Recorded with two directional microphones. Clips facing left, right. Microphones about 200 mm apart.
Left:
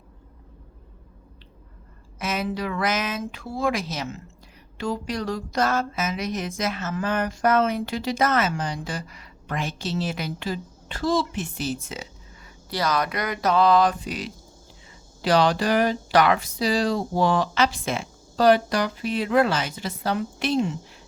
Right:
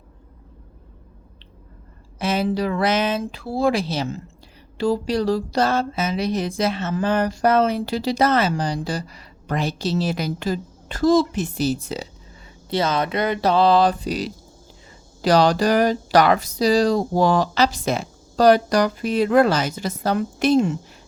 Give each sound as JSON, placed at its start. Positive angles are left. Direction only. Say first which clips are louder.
{"t": 2.1, "sound": "speech", "louder": "right 6 dB", "side_deg": -30}
{"t": 12.7, "sound": "speech", "louder": "right 4 dB", "side_deg": -25}